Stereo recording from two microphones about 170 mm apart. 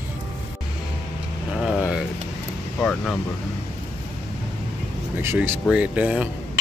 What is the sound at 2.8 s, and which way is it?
Speech, 10° left (ahead or behind).